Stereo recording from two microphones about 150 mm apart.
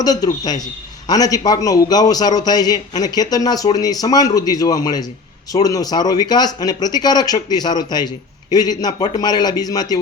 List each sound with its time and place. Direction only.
0.0 s speech: 25° left (ahead or behind)